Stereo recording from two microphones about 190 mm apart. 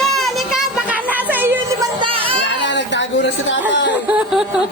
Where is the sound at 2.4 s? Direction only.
70° left (ahead or behind).